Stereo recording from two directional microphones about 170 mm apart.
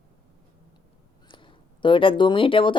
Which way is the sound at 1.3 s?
30° left (ahead or behind).